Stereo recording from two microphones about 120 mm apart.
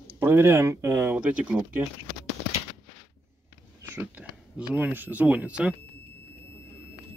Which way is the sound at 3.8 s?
20° right (ahead or behind).